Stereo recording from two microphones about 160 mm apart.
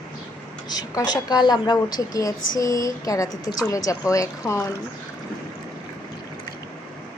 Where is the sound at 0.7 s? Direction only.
25° left (ahead or behind).